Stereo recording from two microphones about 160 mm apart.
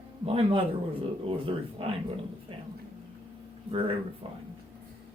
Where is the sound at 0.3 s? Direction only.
35° right (ahead or behind).